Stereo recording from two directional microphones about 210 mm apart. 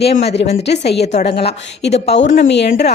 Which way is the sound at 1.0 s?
30° left (ahead or behind).